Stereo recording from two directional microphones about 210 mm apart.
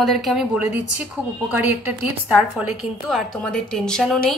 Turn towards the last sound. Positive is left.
turn(degrees=0)  # may be behind; listen again after turning